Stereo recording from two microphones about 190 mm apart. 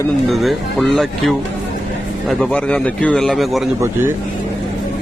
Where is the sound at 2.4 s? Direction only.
5° left (ahead or behind).